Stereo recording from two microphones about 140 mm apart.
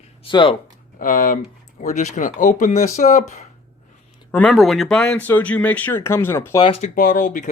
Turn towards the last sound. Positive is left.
turn(degrees=70)  # may be behind; listen again after turning